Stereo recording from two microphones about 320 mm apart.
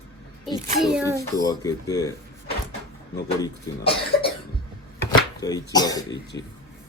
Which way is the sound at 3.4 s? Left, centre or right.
Centre.